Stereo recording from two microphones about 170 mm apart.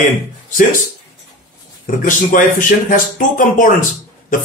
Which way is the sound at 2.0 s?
50° left (ahead or behind).